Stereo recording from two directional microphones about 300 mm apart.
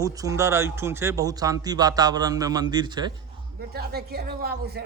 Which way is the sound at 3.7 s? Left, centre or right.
Right.